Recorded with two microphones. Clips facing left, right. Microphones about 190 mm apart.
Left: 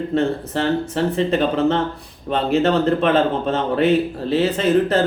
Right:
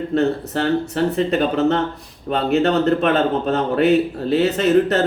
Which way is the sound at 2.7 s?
30° left (ahead or behind).